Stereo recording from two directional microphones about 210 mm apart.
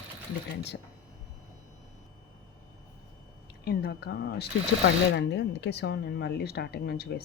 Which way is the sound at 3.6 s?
50° left (ahead or behind).